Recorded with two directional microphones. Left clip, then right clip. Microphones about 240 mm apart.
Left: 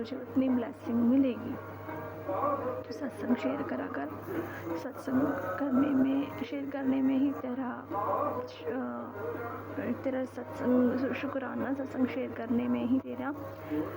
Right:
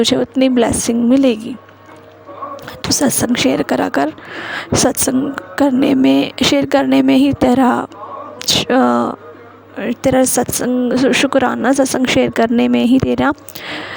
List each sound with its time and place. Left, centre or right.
0.0 s speech: right
2.9 s speech: right